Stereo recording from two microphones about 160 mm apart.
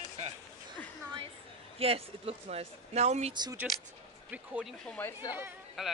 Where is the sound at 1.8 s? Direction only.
40° right (ahead or behind).